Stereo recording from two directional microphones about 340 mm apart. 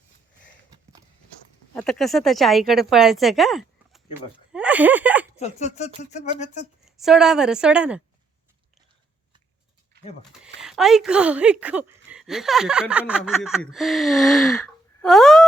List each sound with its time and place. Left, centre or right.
1.7 s speech: centre
5.4 s speech: centre
6.8 s speech: centre
9.9 s a sound: right
10.6 s speech: centre
13.7 s gasp: centre